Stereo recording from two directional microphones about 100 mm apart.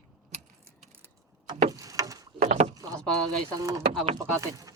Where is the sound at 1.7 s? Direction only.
35° right (ahead or behind).